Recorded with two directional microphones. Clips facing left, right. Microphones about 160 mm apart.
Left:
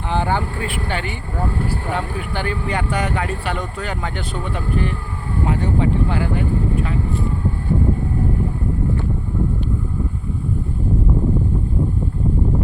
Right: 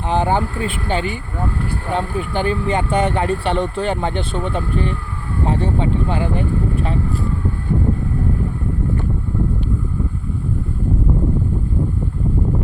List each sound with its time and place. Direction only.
0.1 s speech: 20° right (ahead or behind)